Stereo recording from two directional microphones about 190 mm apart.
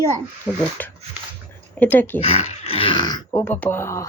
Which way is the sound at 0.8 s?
10° left (ahead or behind).